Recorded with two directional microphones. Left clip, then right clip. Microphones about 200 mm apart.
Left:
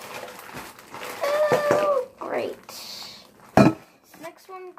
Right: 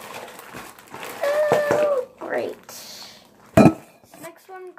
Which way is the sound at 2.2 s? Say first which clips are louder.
Right 2 dB; 15° right (ahead or behind).